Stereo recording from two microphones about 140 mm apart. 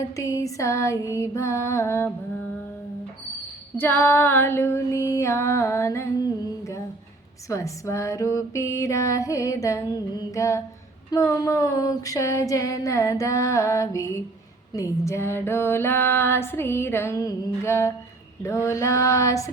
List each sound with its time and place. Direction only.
0.2 s music: 25° left (ahead or behind)
3.8 s music: 15° left (ahead or behind)
14.7 s female singing: 20° left (ahead or behind)
18.4 s music: 20° left (ahead or behind)